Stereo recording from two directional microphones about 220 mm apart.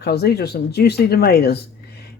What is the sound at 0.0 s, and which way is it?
Speech, 50° left (ahead or behind).